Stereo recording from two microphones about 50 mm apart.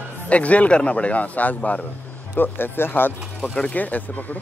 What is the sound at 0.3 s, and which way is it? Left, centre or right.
Speech, left.